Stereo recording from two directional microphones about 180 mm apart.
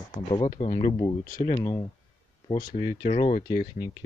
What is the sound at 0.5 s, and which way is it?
Speech, 40° left (ahead or behind).